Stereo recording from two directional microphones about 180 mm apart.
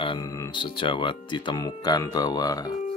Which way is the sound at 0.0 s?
30° left (ahead or behind).